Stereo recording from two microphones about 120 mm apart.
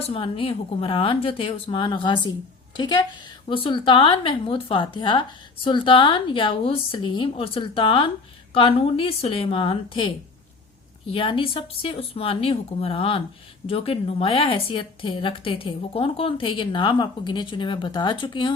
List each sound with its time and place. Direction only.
0.0 s a woman's voice: 50° left (ahead or behind)